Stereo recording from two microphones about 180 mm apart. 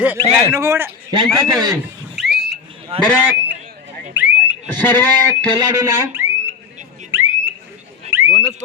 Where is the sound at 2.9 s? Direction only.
35° right (ahead or behind).